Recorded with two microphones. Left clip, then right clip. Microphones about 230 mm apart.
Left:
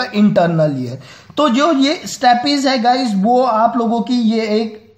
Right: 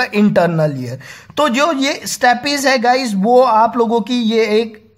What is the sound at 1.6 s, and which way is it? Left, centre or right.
Speech, right.